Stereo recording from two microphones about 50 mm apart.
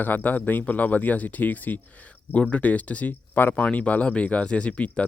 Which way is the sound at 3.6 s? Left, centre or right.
Left.